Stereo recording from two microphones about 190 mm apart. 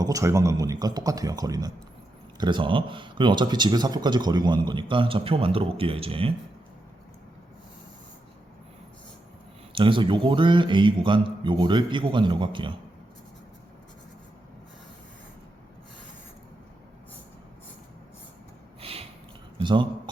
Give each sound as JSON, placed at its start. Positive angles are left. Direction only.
{"t": 0.0, "sound": "speech", "side_deg": -15}
{"t": 9.7, "sound": "speech", "side_deg": -25}
{"t": 18.8, "sound": "snort", "side_deg": -30}
{"t": 19.6, "sound": "speech", "side_deg": -25}